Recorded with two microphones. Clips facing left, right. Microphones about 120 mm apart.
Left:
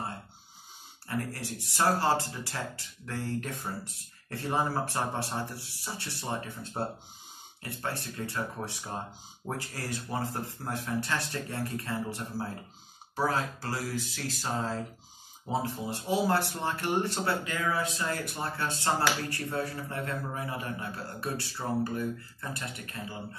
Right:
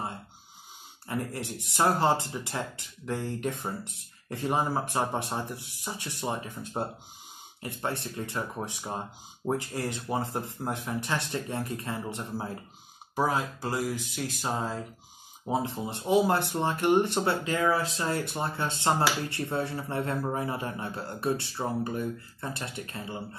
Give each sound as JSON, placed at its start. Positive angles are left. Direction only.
{"t": 1.0, "sound": "speech", "side_deg": -20}